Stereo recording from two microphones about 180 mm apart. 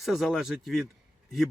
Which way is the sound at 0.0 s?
Centre (ahead or behind).